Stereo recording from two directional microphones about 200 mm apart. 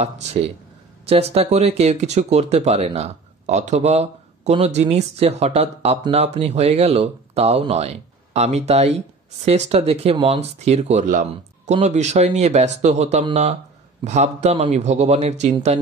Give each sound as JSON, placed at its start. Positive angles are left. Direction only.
{"t": 0.0, "sound": "speech", "side_deg": -35}